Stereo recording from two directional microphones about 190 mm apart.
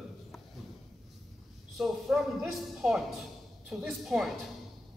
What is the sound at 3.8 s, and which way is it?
Speech, centre (ahead or behind).